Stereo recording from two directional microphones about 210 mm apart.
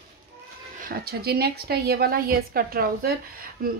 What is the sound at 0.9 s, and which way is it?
A woman's voice, 45° right (ahead or behind).